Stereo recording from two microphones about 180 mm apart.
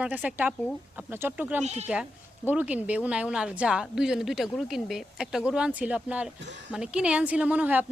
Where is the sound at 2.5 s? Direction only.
10° right (ahead or behind).